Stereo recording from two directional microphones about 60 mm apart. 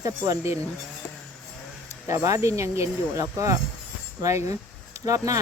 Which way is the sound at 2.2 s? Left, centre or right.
Right.